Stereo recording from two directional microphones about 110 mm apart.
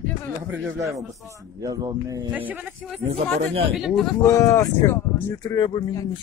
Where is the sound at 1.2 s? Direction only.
30° right (ahead or behind).